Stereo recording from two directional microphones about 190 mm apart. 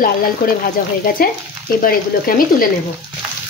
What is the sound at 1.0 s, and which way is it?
Speech, 50° left (ahead or behind).